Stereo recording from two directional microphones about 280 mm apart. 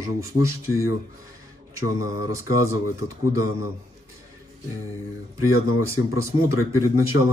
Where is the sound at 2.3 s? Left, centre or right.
Centre.